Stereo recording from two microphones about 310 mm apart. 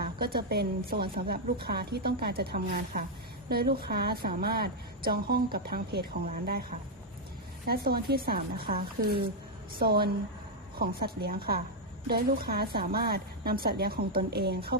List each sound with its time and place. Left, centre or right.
0.0 s a woman's voice: right